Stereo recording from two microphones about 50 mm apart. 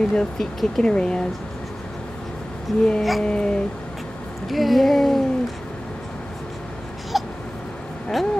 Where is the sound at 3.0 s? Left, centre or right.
Centre.